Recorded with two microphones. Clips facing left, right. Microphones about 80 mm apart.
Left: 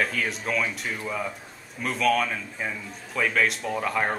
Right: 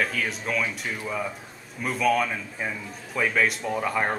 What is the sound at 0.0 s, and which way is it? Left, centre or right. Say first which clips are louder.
Speech: even; centre.